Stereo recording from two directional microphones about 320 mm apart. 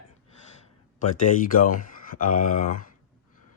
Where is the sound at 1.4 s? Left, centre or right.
Left.